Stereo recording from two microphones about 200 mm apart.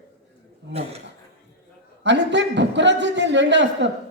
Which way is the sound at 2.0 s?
60° right (ahead or behind).